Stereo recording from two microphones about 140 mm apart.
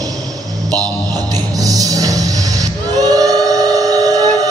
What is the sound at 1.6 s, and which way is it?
Music, 25° right (ahead or behind).